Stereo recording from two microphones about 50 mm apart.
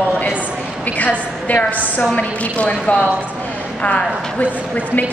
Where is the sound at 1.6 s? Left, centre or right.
Left.